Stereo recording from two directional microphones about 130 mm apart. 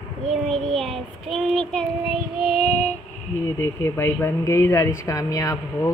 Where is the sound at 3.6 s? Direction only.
20° left (ahead or behind).